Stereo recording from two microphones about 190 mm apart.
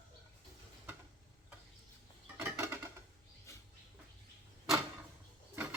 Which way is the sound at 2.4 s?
15° right (ahead or behind).